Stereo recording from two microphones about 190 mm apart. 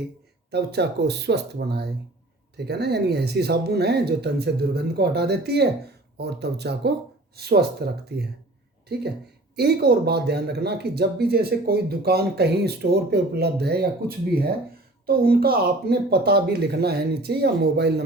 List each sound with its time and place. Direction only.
0.5 s speech: 60° right (ahead or behind)
9.6 s speech: 55° right (ahead or behind)